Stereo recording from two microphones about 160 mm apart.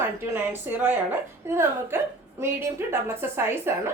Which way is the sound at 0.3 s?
10° right (ahead or behind).